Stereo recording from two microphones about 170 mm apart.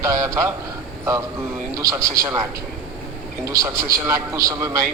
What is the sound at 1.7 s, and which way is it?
Speech, 20° right (ahead or behind).